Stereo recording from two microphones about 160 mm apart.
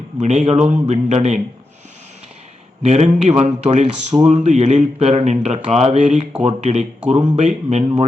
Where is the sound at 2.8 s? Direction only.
40° right (ahead or behind).